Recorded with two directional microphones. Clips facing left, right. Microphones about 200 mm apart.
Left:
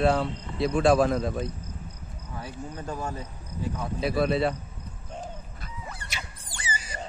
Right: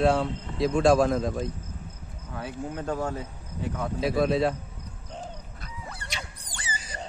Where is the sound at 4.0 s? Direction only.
Centre (ahead or behind).